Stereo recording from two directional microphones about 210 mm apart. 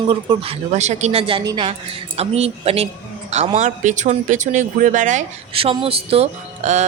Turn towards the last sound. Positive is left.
turn(degrees=-35)  # may be behind; listen again after turning